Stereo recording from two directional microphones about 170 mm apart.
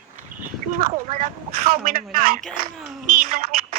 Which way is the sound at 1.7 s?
55° right (ahead or behind).